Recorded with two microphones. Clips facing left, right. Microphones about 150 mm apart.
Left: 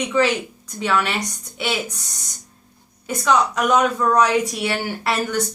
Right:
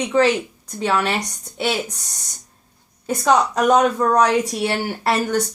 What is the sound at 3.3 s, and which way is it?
Speech, 40° right (ahead or behind).